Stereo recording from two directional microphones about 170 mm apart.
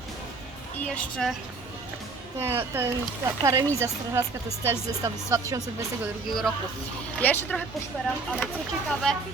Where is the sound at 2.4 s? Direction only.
15° right (ahead or behind).